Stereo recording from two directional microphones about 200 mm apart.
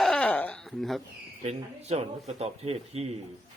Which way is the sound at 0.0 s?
5° left (ahead or behind).